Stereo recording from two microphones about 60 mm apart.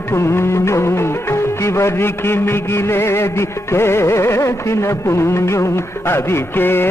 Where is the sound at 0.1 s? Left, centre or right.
Left.